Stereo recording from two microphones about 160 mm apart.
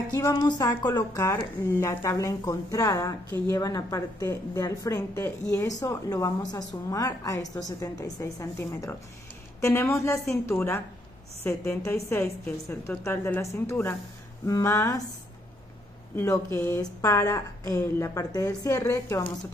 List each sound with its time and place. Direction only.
0.1 s a woman's voice: 20° left (ahead or behind)
16.2 s a woman's voice: 15° left (ahead or behind)